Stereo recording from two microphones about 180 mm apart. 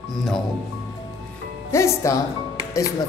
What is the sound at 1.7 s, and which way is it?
Speech, 15° left (ahead or behind).